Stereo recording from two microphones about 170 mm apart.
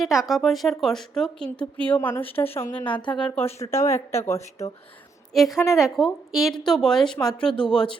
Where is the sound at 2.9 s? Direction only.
30° left (ahead or behind).